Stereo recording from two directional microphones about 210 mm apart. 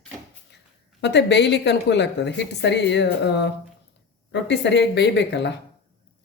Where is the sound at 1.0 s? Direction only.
55° left (ahead or behind).